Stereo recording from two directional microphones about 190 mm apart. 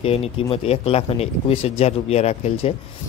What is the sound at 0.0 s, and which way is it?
Speech, 30° left (ahead or behind).